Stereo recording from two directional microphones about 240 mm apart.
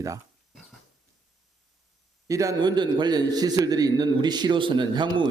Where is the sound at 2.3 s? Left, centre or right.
Centre.